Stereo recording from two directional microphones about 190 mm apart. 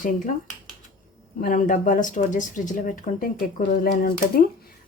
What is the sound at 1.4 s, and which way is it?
Speech, 45° left (ahead or behind).